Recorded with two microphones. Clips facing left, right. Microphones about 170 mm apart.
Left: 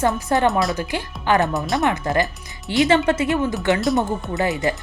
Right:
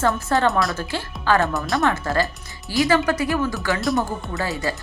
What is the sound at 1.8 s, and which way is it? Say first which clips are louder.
Speech: left 1 dB; 20° left (ahead or behind).